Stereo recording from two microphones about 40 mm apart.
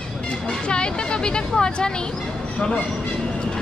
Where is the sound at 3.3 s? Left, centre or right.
Left.